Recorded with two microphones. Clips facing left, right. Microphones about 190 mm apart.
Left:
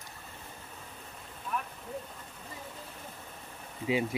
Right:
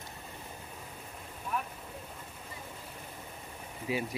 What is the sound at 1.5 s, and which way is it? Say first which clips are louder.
Vehicle: even; 5° right (ahead or behind).